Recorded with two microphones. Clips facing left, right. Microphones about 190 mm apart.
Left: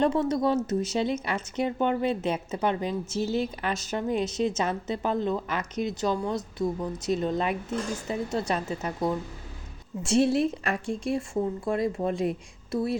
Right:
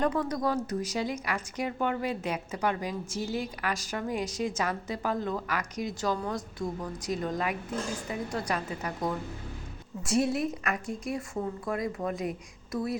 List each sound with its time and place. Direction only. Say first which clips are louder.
0.0 s speech: left 4 dB; 25° left (ahead or behind)